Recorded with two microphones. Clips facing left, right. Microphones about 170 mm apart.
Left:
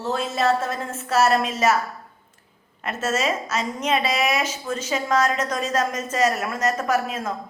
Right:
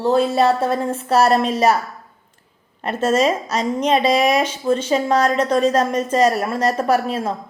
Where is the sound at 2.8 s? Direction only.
30° right (ahead or behind).